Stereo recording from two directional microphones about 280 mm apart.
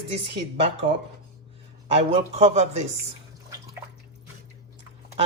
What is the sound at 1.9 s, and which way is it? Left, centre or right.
Speech, right.